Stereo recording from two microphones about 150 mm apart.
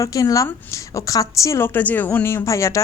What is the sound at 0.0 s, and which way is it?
A woman's voice, 20° left (ahead or behind).